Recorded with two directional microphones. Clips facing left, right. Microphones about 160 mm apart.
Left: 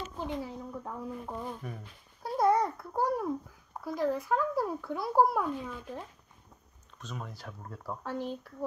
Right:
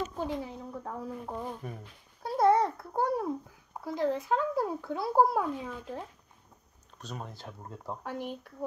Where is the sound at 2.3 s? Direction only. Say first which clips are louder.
Right 2 dB; 25° right (ahead or behind).